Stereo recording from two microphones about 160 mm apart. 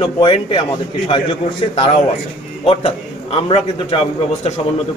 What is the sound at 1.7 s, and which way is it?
A man's voice, 40° left (ahead or behind).